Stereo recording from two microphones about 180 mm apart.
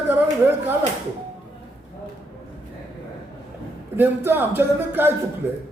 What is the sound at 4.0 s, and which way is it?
Speech, 10° right (ahead or behind).